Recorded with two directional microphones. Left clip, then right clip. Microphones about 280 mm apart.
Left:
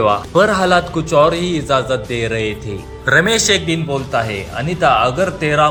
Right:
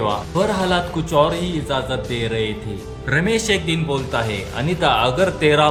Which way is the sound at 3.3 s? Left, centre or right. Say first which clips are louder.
Left 4 dB; centre.